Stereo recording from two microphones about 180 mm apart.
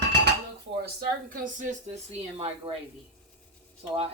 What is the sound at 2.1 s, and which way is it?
Speech, 35° right (ahead or behind).